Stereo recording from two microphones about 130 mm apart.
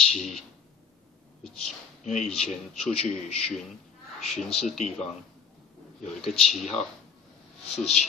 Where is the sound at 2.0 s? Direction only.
5° left (ahead or behind).